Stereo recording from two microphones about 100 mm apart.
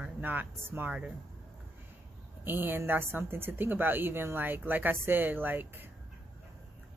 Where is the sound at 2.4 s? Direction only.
20° right (ahead or behind).